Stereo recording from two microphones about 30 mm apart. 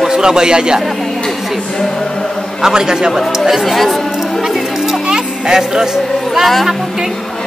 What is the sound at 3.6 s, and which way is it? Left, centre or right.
Speech, centre.